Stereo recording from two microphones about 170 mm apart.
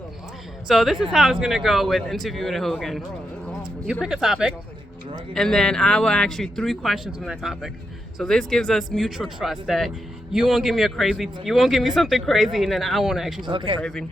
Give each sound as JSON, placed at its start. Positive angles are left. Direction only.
{"t": 0.7, "sound": "speech", "side_deg": 0}
{"t": 4.0, "sound": "speech", "side_deg": -5}
{"t": 13.4, "sound": "speech", "side_deg": -30}